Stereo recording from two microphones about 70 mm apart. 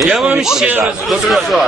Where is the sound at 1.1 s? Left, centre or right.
Centre.